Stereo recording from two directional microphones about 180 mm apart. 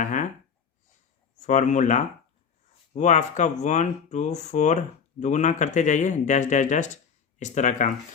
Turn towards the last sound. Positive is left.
turn(degrees=45)  # may be behind; listen again after turning